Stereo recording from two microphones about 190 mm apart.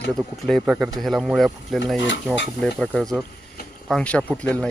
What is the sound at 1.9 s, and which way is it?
Speech, 75° left (ahead or behind).